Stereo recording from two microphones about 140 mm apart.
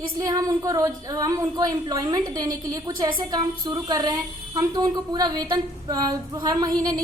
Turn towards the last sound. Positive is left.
turn(degrees=-25)  # may be behind; listen again after turning